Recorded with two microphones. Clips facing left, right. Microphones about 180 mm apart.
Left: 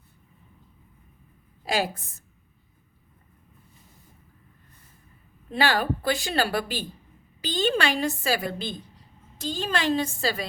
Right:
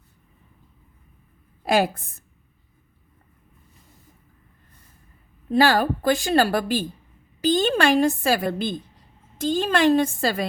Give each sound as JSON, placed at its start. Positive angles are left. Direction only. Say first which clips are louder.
{"t": 1.6, "sound": "a woman's voice", "louder": "right 6 dB", "side_deg": -55}
{"t": 5.5, "sound": "a woman's voice", "louder": "right 6 dB", "side_deg": -40}